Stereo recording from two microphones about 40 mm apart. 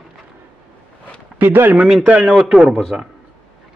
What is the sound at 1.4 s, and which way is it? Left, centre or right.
Speech, right.